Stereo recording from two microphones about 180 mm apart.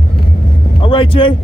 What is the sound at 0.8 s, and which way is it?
Vehicle, 30° left (ahead or behind).